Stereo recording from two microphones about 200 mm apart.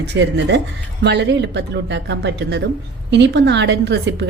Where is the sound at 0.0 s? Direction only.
65° right (ahead or behind).